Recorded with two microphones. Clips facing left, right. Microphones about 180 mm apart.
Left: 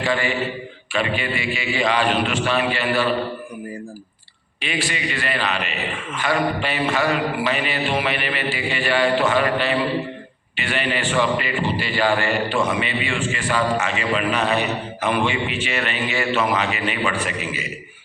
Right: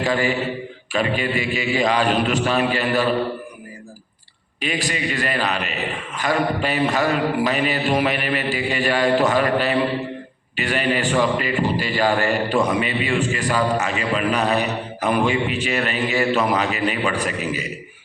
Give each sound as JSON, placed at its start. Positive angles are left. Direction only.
{"t": 0.0, "sound": "a man's voice", "side_deg": -40}
{"t": 4.6, "sound": "a man's voice", "side_deg": -40}